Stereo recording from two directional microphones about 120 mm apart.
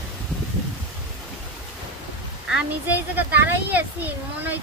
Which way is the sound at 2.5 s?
10° right (ahead or behind).